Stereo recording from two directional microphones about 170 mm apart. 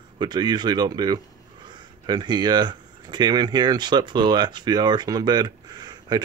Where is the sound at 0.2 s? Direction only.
25° right (ahead or behind).